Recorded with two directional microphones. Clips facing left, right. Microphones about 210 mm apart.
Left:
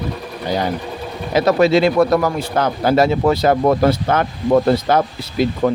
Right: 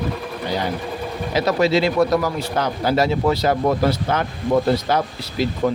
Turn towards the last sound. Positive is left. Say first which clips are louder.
# left 4 dB
turn(degrees=55)  # may be behind; listen again after turning